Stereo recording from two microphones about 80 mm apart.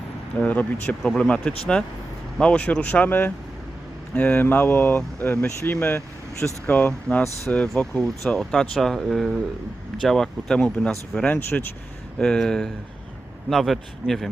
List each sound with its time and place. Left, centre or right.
0.3 s speech: centre